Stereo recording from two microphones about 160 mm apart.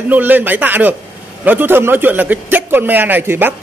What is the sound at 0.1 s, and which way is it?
A man's voice, 10° right (ahead or behind).